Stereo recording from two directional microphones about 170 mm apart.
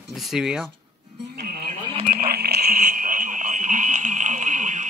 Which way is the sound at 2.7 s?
50° right (ahead or behind).